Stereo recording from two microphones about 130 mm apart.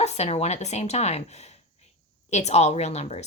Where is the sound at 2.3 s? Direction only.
60° left (ahead or behind).